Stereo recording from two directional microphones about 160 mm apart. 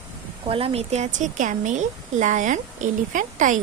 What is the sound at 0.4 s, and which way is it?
A woman's voice, 35° right (ahead or behind).